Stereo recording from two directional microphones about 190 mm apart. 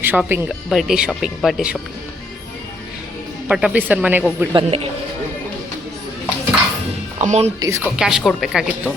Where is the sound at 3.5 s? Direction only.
5° right (ahead or behind).